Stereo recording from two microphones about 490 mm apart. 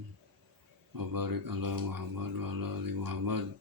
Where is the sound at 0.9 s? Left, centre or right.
Right.